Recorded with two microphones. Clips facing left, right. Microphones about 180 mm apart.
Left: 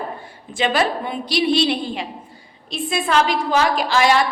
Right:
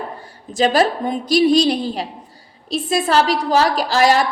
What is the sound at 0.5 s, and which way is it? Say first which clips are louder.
A woman's voice: right 4 dB; 40° right (ahead or behind).